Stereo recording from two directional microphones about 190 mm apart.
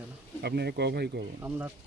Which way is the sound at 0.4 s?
60° right (ahead or behind).